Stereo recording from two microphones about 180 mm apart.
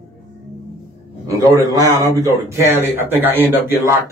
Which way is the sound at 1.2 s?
15° right (ahead or behind).